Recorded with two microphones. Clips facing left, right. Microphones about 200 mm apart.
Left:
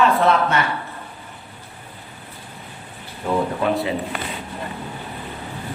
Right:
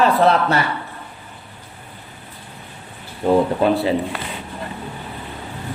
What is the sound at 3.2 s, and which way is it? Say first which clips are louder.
Speech: right 5 dB; 35° right (ahead or behind).